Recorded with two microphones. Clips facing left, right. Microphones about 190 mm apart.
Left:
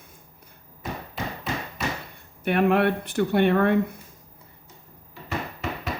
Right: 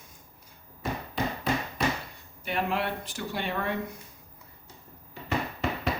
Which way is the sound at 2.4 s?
60° left (ahead or behind).